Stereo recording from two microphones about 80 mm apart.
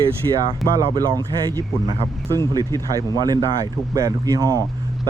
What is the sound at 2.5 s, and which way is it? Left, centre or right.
Speech, right.